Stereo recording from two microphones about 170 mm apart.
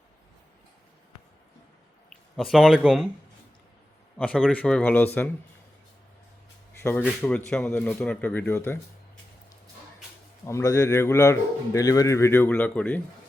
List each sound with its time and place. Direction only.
2.0 s speech: centre (ahead or behind)
4.2 s a man's voice: 5° left (ahead or behind)
6.8 s a man's voice: 15° left (ahead or behind)
10.4 s a man's voice: 20° left (ahead or behind)